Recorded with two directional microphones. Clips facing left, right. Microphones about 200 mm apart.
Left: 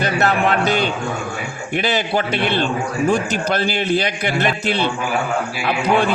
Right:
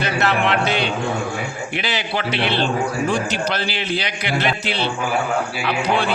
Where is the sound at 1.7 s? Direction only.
45° left (ahead or behind).